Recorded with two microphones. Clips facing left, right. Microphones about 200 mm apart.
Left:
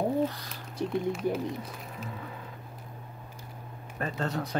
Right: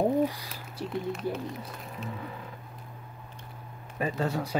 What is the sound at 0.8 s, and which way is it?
Speech, 20° left (ahead or behind).